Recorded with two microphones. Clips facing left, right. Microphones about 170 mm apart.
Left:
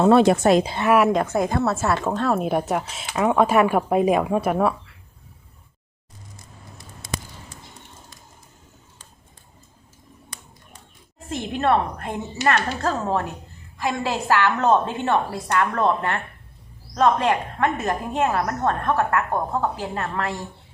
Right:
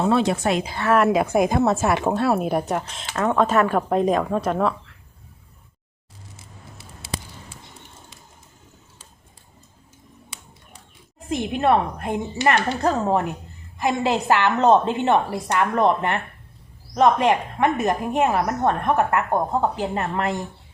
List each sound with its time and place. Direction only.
0.0 s speech: 55° left (ahead or behind); by 0.7 s 40° left (ahead or behind)
0.7 s a woman's voice: 20° left (ahead or behind)
1.1 s speech: 10° right (ahead or behind); by 4.9 s 5° left (ahead or behind)
6.3 s a sound: 5° right (ahead or behind)
11.3 s a woman's voice: 15° right (ahead or behind)